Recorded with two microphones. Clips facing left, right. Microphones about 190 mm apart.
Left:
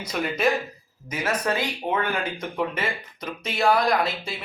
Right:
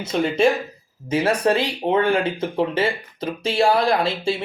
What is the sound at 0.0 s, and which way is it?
Speech, 25° right (ahead or behind).